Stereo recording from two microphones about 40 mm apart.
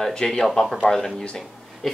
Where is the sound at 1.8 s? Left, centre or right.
Centre.